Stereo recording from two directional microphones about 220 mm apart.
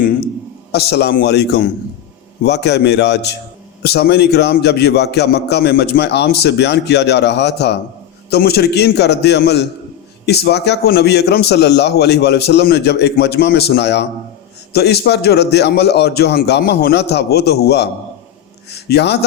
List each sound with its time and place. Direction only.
0.7 s speech: 50° left (ahead or behind)